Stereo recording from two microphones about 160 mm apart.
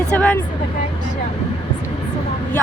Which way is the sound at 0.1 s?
10° left (ahead or behind).